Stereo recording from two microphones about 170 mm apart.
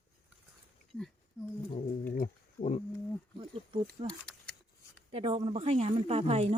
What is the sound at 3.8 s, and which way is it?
Speech, 5° left (ahead or behind).